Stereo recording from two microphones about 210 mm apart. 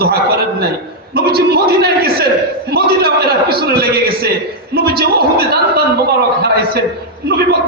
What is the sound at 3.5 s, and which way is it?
A man's voice, 45° right (ahead or behind).